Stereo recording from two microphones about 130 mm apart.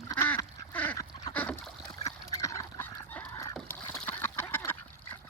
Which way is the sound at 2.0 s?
25° left (ahead or behind).